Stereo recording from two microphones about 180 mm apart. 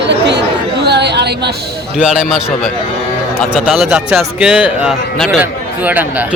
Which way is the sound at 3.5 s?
Centre (ahead or behind).